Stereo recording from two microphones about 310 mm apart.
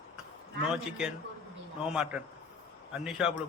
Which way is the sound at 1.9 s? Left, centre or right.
Centre.